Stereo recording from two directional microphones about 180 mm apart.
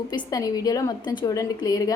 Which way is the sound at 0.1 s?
20° left (ahead or behind).